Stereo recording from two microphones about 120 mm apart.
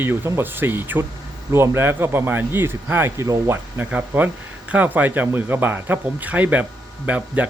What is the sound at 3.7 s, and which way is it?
Speech, 15° right (ahead or behind).